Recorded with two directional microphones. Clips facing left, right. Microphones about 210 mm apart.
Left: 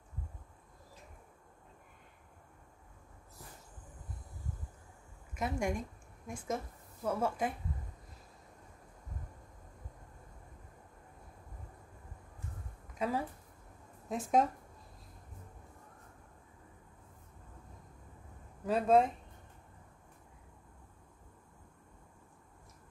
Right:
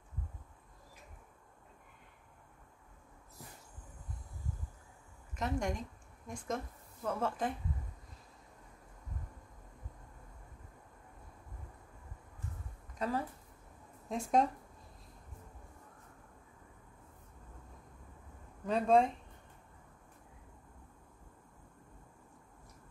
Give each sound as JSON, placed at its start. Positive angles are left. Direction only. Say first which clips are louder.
{"t": 5.3, "sound": "speech", "louder": "left 1 dB", "side_deg": 10}
{"t": 13.0, "sound": "speech", "louder": "left 1 dB", "side_deg": 10}
{"t": 18.7, "sound": "speech", "louder": "left 1 dB", "side_deg": 5}